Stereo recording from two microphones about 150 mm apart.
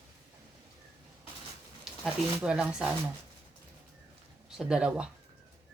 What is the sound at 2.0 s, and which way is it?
Speech, 5° right (ahead or behind).